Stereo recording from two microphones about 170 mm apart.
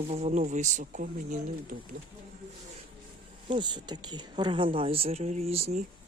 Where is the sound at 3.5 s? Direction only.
25° right (ahead or behind).